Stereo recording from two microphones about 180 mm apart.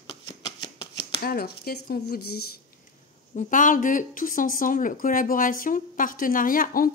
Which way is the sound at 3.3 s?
45° left (ahead or behind).